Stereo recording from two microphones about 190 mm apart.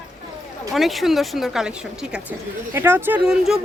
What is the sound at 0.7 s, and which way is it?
A woman's voice, centre (ahead or behind).